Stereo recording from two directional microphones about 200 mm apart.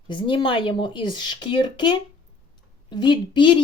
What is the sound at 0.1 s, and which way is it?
Speech, 25° left (ahead or behind).